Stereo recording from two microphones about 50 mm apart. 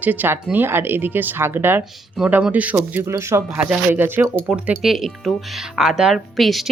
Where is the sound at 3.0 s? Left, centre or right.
Right.